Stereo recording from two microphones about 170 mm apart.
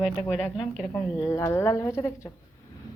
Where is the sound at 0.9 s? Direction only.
15° left (ahead or behind).